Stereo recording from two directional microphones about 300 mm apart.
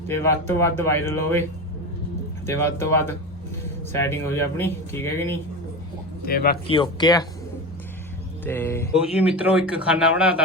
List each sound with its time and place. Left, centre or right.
0.1 s speech: centre
2.5 s speech: centre
6.2 s speech: left
6.7 s speech: centre
8.4 s speech: centre
9.0 s speech: centre